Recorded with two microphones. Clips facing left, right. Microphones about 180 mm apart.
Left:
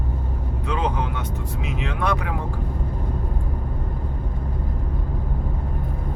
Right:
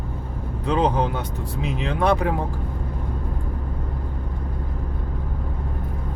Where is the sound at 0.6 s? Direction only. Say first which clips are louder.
Right 5 dB; 35° right (ahead or behind).